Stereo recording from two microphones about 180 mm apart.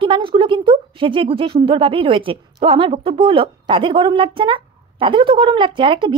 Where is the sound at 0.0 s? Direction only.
30° right (ahead or behind).